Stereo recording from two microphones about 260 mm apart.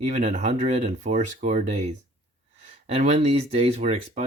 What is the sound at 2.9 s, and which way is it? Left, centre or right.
Speech, right.